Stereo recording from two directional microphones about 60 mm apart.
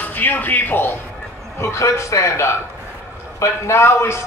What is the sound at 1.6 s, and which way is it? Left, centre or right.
A man's voice, left.